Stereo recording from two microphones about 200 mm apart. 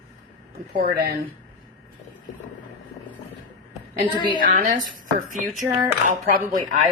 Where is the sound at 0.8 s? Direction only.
50° right (ahead or behind).